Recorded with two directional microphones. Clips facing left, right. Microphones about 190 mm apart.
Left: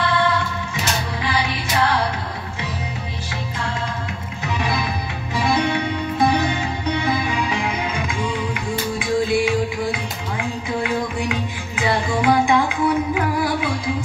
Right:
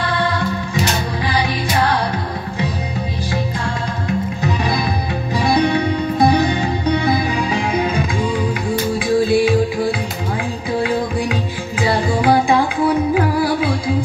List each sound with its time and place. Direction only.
5.3 s music: 35° right (ahead or behind)
11.7 s music: 35° right (ahead or behind)